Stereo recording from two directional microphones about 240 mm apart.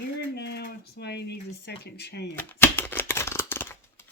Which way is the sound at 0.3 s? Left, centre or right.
Left.